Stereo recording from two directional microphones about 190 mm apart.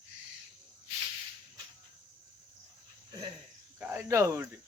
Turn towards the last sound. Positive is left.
turn(degrees=-15)  # may be behind; listen again after turning